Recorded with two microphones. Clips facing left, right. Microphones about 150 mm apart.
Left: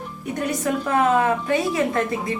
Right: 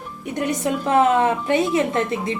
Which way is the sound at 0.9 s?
25° right (ahead or behind).